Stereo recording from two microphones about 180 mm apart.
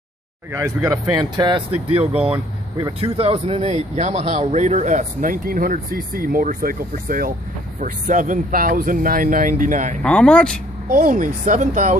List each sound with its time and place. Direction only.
1.1 s speech: 25° right (ahead or behind); by 9.9 s 45° right (ahead or behind)
10.0 s speech: 5° left (ahead or behind)
10.9 s speech: 45° right (ahead or behind)